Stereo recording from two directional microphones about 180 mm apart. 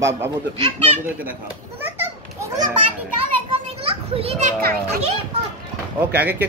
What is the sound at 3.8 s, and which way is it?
Children playing, 30° right (ahead or behind).